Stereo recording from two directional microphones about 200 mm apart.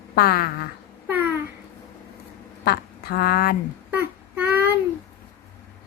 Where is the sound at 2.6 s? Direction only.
50° left (ahead or behind).